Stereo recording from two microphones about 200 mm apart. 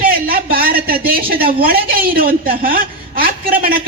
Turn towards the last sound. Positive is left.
turn(degrees=-45)  # may be behind; listen again after turning